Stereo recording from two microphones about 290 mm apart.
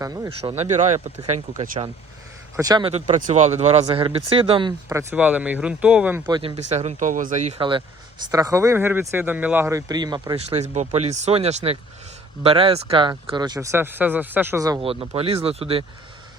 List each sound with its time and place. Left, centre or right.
0.0 s speech: centre
2.6 s speech: centre